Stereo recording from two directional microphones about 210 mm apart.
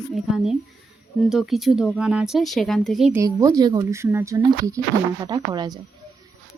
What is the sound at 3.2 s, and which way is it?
Speech, 15° right (ahead or behind).